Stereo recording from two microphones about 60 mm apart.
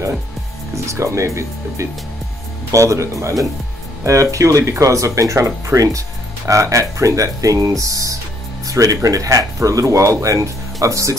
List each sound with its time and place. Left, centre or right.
0.8 s speech: right